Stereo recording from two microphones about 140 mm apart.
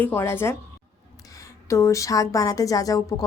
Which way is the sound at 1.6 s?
20° left (ahead or behind).